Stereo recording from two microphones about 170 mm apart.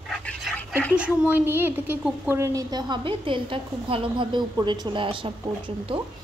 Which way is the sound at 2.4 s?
20° right (ahead or behind).